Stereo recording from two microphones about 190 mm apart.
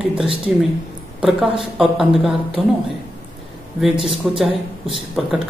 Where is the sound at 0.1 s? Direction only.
5° right (ahead or behind).